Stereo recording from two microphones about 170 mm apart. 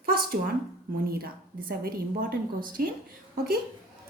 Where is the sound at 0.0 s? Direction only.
60° right (ahead or behind).